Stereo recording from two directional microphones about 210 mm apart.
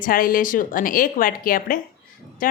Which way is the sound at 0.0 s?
45° left (ahead or behind).